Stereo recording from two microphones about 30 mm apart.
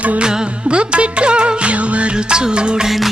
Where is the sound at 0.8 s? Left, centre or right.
Right.